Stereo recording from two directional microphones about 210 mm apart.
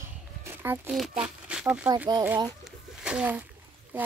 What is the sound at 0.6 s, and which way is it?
Speech, 5° right (ahead or behind).